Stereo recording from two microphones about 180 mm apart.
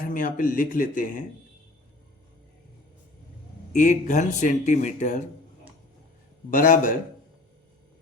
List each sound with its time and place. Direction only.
0.0 s speech: 50° left (ahead or behind)
3.8 s speech: 45° left (ahead or behind)
6.5 s speech: 50° left (ahead or behind)